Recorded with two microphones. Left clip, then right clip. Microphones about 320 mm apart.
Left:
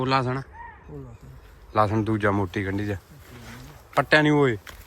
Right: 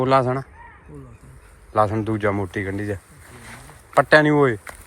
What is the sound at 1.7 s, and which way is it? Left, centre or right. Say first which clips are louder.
Speech: right 3 dB; centre.